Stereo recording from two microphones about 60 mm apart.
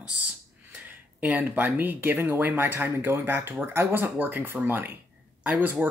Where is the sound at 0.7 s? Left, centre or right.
Right.